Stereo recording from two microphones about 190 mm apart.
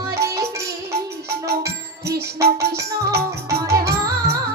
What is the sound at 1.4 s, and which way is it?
Music, 55° right (ahead or behind).